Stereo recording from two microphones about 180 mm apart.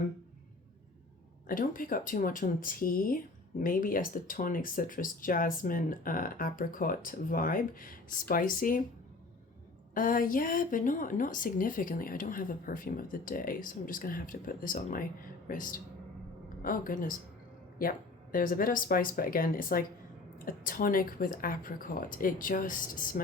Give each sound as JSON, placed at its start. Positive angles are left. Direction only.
{"t": 1.5, "sound": "speech", "side_deg": 50}
{"t": 9.9, "sound": "speech", "side_deg": 50}